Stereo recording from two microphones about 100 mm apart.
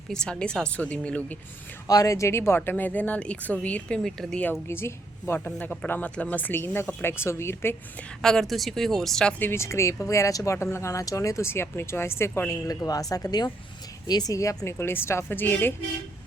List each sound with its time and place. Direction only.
0.1 s speech: 10° left (ahead or behind)
1.9 s speech: 35° left (ahead or behind); by 4.5 s 10° left (ahead or behind)
4.7 s a woman's voice: 25° left (ahead or behind)
8.2 s speech: 5° left (ahead or behind)
9.4 s speech: 25° left (ahead or behind)
12.6 s speech: 35° left (ahead or behind); by 15.7 s 20° left (ahead or behind)